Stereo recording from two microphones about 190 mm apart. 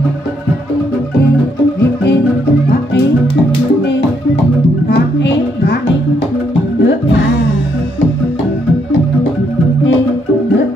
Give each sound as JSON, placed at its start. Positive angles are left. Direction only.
{"t": 4.8, "sound": "music", "side_deg": 65}